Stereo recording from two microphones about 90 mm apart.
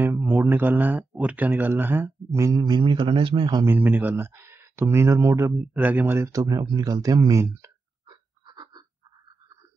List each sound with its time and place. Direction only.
0.0 s mantra: 25° right (ahead or behind)
0.5 s speech: 20° right (ahead or behind)
2.6 s speech: 60° right (ahead or behind)
3.6 s speech: 20° right (ahead or behind)
5.8 s speech: 20° right (ahead or behind)
6.1 s speech: 35° right (ahead or behind)
8.1 s a sound: 55° right (ahead or behind)